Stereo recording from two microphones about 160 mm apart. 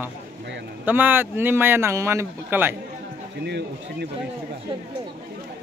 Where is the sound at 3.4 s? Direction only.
90° right.